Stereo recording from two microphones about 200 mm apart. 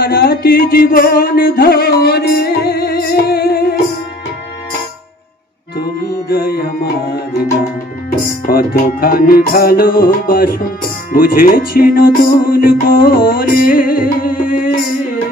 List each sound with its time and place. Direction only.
0.0 s music: 50° left (ahead or behind)
5.8 s music: 55° left (ahead or behind)
8.5 s music: 50° left (ahead or behind)